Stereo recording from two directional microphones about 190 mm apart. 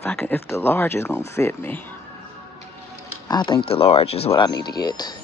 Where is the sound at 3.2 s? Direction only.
25° left (ahead or behind).